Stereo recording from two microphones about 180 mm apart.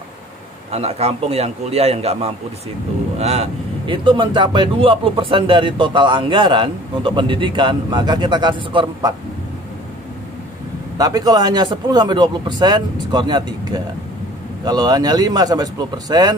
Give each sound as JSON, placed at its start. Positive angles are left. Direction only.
{"t": 0.7, "sound": "a man's voice", "side_deg": -35}
{"t": 11.0, "sound": "speech", "side_deg": -20}